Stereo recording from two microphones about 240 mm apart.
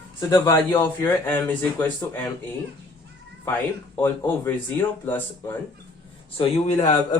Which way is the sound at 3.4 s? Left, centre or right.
Centre.